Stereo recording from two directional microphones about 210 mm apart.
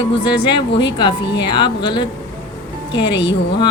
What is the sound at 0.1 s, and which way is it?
A woman's voice, 25° left (ahead or behind).